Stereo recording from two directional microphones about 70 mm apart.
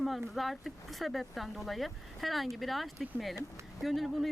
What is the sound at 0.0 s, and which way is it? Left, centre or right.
Speech, centre.